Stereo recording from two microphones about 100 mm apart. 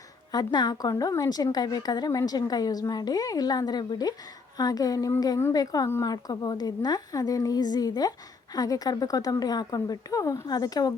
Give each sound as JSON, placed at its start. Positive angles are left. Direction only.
{"t": 0.3, "sound": "a woman's voice", "side_deg": 45}